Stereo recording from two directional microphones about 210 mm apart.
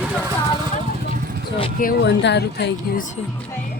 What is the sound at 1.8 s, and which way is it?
Speech, 50° left (ahead or behind).